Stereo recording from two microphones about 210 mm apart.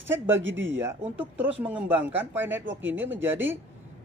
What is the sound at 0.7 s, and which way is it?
Speech, 10° right (ahead or behind).